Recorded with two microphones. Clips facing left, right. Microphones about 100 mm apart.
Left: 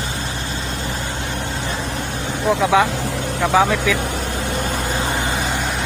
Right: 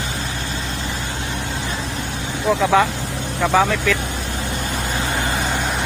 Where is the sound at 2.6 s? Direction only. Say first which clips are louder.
Even; 5° left (ahead or behind).